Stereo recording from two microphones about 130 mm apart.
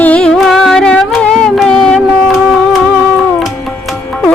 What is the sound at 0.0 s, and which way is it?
Music, 10° left (ahead or behind).